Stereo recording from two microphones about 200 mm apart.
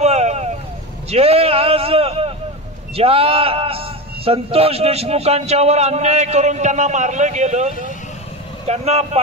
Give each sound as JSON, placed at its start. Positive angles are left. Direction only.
{"t": 0.0, "sound": "vehicle", "side_deg": -35}
{"t": 1.1, "sound": "a sound", "side_deg": -30}
{"t": 3.0, "sound": "a man's voice", "side_deg": -30}